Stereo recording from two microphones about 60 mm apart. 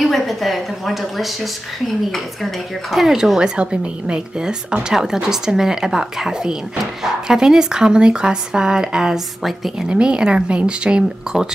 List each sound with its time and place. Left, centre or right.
0.0 s a woman's voice: centre
2.9 s speech: centre
9.8 s speech: centre